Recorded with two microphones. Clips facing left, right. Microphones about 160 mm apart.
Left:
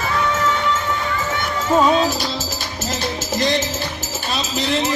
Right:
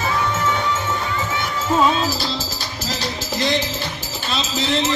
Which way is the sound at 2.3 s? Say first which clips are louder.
Left 1 dB; 20° left (ahead or behind).